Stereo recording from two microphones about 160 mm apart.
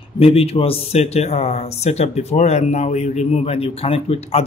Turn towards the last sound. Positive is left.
turn(degrees=40)  # may be behind; listen again after turning